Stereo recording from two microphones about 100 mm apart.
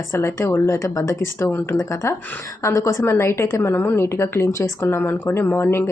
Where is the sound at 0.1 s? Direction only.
25° left (ahead or behind).